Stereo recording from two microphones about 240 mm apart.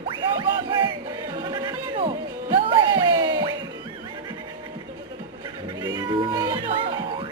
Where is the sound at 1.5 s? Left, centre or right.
Right.